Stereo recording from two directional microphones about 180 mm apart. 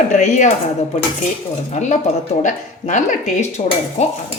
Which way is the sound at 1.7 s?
40° left (ahead or behind).